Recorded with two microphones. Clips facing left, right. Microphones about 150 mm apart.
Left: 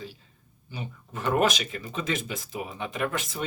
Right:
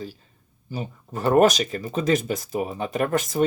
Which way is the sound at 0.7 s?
40° right (ahead or behind).